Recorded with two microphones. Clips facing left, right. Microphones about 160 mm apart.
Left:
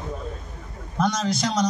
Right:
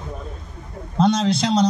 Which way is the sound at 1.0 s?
30° right (ahead or behind).